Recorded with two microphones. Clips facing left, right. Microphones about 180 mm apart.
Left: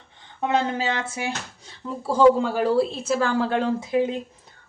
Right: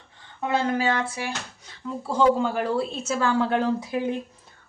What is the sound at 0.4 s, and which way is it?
A woman's voice, 20° left (ahead or behind).